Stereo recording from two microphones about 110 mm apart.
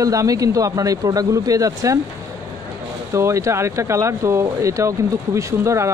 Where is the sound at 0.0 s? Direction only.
30° right (ahead or behind).